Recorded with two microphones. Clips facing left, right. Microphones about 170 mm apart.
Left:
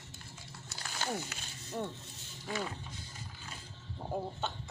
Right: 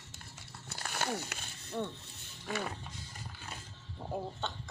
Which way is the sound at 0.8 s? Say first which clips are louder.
Right 1 dB; 60° right (ahead or behind).